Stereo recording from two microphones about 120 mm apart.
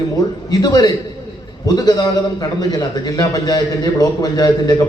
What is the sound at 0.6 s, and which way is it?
A man's voice, 35° left (ahead or behind).